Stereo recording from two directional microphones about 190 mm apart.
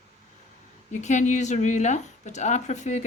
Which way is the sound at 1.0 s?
40° left (ahead or behind).